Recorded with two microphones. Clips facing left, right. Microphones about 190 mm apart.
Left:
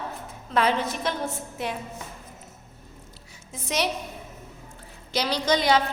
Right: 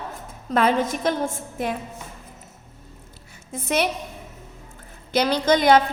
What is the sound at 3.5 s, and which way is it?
Speech, 55° right (ahead or behind).